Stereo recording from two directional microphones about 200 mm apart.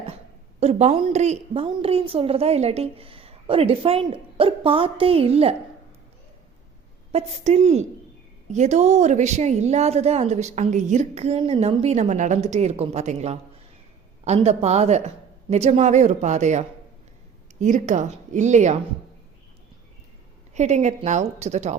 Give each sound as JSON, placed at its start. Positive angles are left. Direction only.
{"t": 0.6, "sound": "a woman's voice", "side_deg": -35}
{"t": 7.1, "sound": "a woman's voice", "side_deg": -30}
{"t": 20.5, "sound": "a woman's voice", "side_deg": -35}